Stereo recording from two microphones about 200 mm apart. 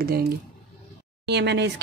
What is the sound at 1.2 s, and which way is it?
Speech, 60° right (ahead or behind).